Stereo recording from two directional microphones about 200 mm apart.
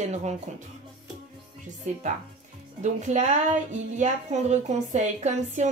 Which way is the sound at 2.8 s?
35° right (ahead or behind).